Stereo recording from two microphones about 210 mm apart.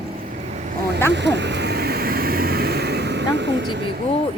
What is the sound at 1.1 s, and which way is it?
Vehicle, 55° right (ahead or behind).